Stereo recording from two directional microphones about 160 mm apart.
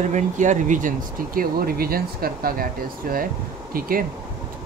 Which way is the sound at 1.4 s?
70° right (ahead or behind).